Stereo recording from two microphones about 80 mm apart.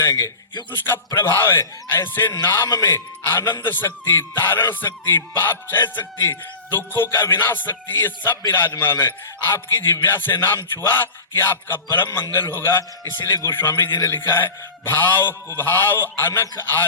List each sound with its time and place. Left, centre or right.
0.0 s a man's voice: left